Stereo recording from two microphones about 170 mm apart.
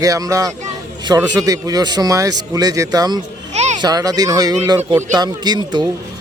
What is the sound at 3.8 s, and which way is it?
Speech, 20° right (ahead or behind).